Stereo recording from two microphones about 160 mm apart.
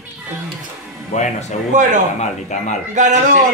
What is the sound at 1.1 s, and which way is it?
Speech, 50° left (ahead or behind).